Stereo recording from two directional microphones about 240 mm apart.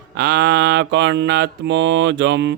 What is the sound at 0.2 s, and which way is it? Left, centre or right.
Mantra, right.